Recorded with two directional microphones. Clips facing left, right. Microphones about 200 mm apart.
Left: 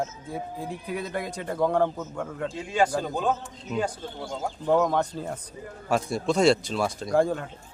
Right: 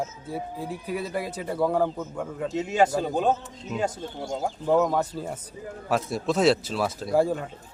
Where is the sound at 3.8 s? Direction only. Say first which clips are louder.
Right 1 dB; 20° right (ahead or behind).